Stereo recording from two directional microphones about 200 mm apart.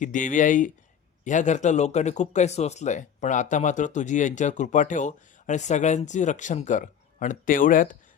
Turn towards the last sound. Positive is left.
turn(degrees=40)  # may be behind; listen again after turning